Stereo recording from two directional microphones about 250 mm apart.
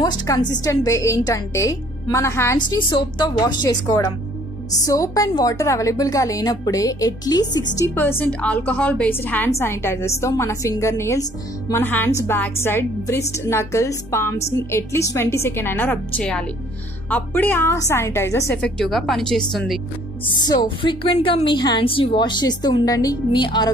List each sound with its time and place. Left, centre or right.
0.0 s a woman's voice: centre
20.2 s a woman's voice: centre